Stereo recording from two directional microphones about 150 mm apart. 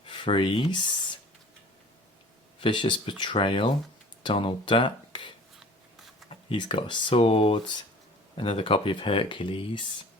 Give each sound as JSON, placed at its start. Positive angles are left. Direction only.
{"t": 0.0, "sound": "speech", "side_deg": 35}
{"t": 2.6, "sound": "speech", "side_deg": 30}
{"t": 6.5, "sound": "speech", "side_deg": 35}